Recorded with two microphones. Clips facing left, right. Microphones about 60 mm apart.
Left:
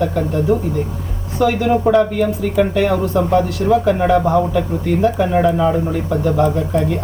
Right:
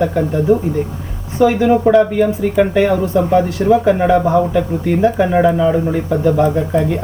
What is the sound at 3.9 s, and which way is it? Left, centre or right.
Speech, centre.